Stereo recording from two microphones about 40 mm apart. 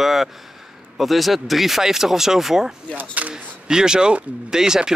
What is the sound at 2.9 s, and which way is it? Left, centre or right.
Speech, right.